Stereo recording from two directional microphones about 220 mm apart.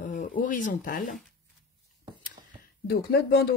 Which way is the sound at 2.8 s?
45° left (ahead or behind).